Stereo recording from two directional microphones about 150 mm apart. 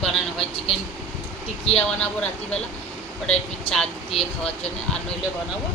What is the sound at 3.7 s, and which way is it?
Speech, 40° left (ahead or behind).